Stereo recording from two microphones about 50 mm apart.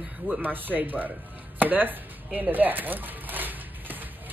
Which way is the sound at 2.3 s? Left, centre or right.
Right.